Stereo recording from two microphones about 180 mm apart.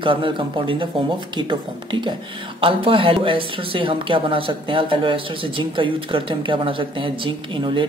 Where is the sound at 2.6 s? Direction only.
30° right (ahead or behind).